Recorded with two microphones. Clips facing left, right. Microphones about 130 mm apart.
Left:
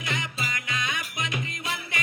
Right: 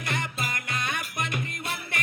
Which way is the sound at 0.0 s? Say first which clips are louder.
Right 1 dB; 55° right (ahead or behind).